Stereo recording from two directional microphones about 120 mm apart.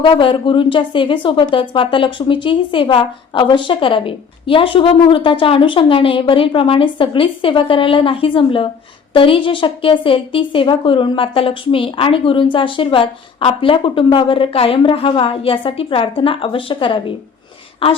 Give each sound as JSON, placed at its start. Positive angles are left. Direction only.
{"t": 0.0, "sound": "a woman's voice", "side_deg": 45}